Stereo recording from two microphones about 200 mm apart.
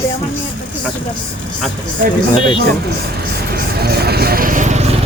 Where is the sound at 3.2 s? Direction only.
50° right (ahead or behind).